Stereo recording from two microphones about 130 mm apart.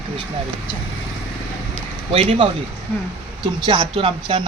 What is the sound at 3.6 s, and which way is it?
Speech, 40° right (ahead or behind).